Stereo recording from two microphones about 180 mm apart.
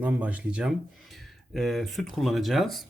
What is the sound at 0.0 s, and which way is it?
A man's voice, 10° right (ahead or behind).